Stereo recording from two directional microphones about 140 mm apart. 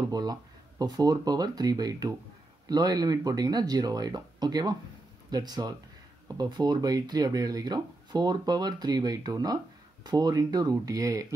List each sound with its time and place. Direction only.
0.1 s speech: 25° right (ahead or behind)